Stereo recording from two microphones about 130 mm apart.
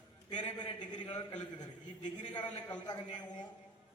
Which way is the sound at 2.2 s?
35° left (ahead or behind).